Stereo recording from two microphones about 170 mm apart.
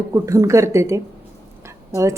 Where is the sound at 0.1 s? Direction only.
20° right (ahead or behind).